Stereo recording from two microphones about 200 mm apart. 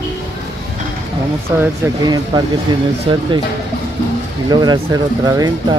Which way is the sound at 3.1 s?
25° right (ahead or behind).